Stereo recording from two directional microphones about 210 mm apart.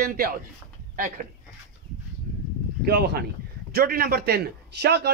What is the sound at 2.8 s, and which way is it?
A man's voice, 50° right (ahead or behind).